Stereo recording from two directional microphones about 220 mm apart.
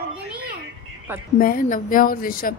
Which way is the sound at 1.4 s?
40° left (ahead or behind).